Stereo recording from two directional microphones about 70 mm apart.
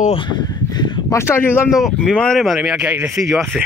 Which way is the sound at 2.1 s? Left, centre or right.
Centre.